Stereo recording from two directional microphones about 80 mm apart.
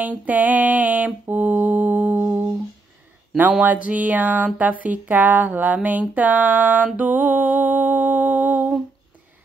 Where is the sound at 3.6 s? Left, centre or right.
Centre.